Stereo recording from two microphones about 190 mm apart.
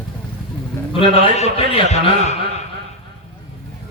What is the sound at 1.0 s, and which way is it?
A man's voice, 30° left (ahead or behind).